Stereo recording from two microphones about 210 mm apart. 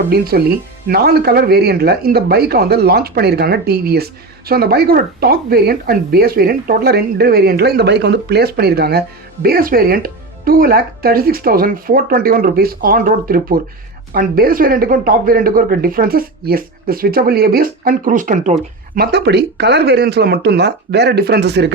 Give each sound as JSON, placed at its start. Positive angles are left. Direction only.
{"t": 0.1, "sound": "speech", "side_deg": -45}
{"t": 18.9, "sound": "speech", "side_deg": -50}